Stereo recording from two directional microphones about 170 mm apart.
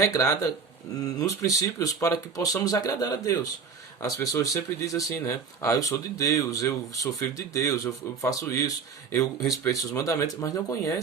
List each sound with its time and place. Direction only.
0.0 s speech: 20° left (ahead or behind)